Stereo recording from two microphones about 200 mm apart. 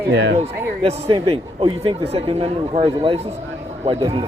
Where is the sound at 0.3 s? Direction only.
30° right (ahead or behind).